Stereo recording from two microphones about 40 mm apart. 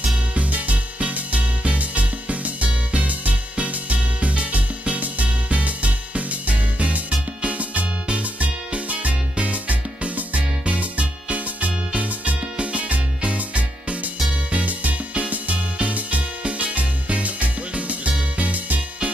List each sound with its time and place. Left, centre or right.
0.3 s music: right